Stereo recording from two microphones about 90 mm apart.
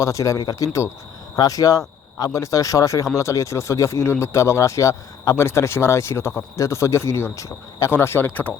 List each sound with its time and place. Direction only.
0.0 s speech: 35° left (ahead or behind)
7.9 s speech: 25° left (ahead or behind)